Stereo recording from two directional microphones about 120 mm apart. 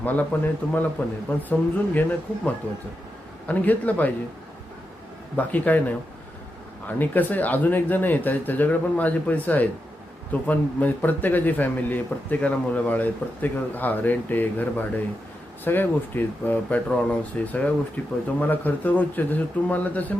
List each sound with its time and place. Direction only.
0.0 s speech: 15° left (ahead or behind)
3.5 s speech: 15° left (ahead or behind)
5.4 s speech: 15° left (ahead or behind)
6.8 s speech: 15° left (ahead or behind)